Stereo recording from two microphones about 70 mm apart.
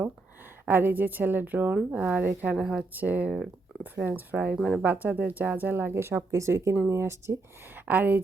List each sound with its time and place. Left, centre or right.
0.6 s a woman's voice: right; by 2.8 s centre
2.9 s a woman's voice: right
7.9 s a woman's voice: right